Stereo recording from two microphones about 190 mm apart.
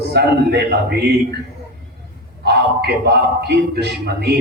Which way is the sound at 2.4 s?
60° right (ahead or behind).